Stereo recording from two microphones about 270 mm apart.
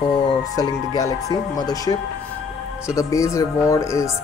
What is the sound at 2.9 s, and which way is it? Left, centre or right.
Speech, centre.